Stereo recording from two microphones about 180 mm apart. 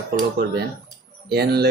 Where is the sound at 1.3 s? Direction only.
65° right (ahead or behind).